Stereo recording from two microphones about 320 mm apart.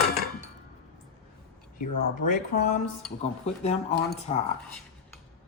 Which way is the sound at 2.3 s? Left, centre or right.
Left.